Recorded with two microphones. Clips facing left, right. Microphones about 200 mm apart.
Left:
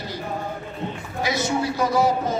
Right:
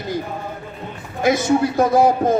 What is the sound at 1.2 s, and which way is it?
Speech, 50° right (ahead or behind).